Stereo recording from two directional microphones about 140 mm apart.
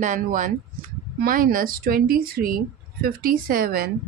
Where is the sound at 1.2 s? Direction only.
90° right.